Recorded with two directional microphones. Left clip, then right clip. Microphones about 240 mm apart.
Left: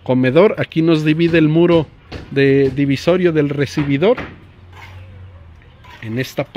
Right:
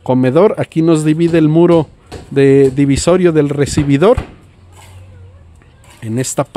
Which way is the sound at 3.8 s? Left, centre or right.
Right.